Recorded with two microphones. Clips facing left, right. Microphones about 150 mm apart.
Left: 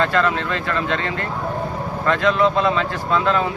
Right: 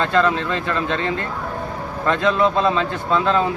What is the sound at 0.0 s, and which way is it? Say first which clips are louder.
Speech: right 1 dB; 20° right (ahead or behind).